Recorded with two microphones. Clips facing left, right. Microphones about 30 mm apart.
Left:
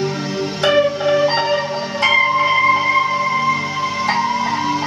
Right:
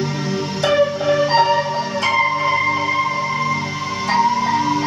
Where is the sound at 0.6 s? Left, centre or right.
Centre.